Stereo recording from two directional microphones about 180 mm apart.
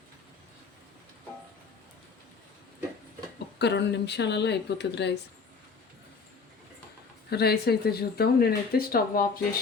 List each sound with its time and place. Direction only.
3.6 s speech: 70° left (ahead or behind)
7.3 s speech: 65° left (ahead or behind)